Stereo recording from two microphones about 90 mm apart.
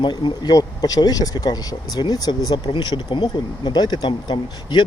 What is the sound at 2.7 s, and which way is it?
Speech, 65° left (ahead or behind).